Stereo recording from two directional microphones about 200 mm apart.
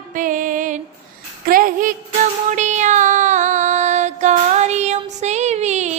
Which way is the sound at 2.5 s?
35° right (ahead or behind).